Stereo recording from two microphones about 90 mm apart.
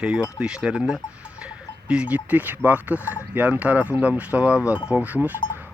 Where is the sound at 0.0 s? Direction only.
10° right (ahead or behind).